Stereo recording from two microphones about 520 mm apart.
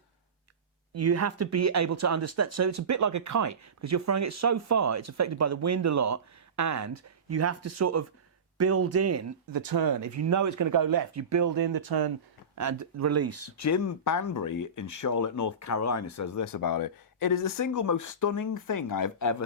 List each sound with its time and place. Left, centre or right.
0.9 s speech: right
12.5 s speech: right
13.6 s speech: left